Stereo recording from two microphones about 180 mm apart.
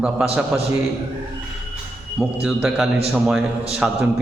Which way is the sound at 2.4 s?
5° right (ahead or behind).